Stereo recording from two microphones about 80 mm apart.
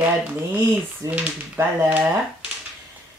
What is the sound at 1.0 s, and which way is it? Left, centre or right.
Speech, right.